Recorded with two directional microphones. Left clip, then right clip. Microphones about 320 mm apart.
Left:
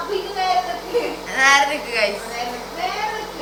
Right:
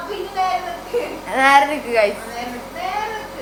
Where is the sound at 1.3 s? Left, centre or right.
Centre.